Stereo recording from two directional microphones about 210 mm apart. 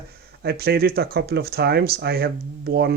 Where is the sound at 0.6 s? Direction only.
45° right (ahead or behind).